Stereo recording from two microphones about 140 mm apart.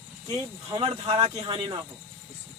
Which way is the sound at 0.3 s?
35° right (ahead or behind).